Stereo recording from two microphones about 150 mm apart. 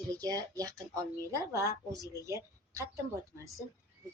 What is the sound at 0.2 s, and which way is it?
A woman's voice, 25° right (ahead or behind).